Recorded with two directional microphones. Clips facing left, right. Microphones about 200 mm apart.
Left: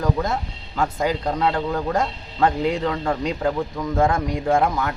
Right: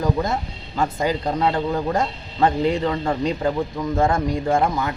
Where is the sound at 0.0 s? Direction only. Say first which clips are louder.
Right 1 dB; 5° right (ahead or behind).